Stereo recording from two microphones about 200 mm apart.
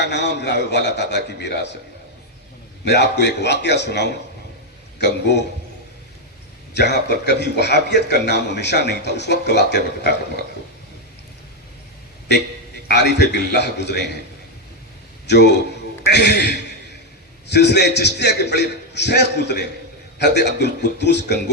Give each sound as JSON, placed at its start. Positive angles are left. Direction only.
{"t": 0.0, "sound": "a man's voice", "side_deg": 60}
{"t": 2.8, "sound": "a man's voice", "side_deg": 55}
{"t": 6.7, "sound": "a man's voice", "side_deg": 55}
{"t": 12.9, "sound": "a man's voice", "side_deg": 55}
{"t": 15.3, "sound": "a man's voice", "side_deg": 60}